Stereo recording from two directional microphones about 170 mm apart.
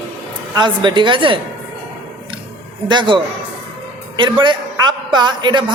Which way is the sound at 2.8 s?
25° right (ahead or behind).